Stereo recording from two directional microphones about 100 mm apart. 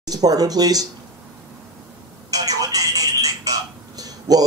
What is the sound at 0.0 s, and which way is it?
Speech, 40° right (ahead or behind).